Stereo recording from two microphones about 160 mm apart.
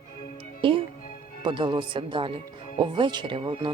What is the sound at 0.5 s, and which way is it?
Speech, 35° right (ahead or behind).